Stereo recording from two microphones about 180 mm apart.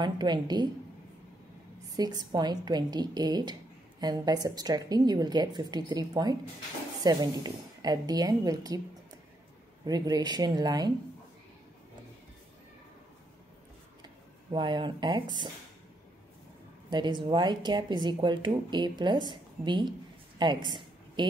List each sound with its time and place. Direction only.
0.0 s speech: 25° right (ahead or behind)
2.0 s speech: 20° right (ahead or behind)
9.8 s speech: 20° right (ahead or behind)
14.0 s speech: 25° right (ahead or behind)
16.9 s speech: 25° right (ahead or behind)
20.3 s a sound: 25° right (ahead or behind)